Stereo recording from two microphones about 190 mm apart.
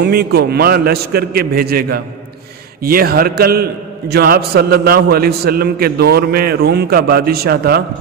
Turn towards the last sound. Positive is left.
turn(degrees=-55)  # may be behind; listen again after turning